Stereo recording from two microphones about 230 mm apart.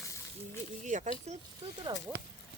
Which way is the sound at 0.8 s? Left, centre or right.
Right.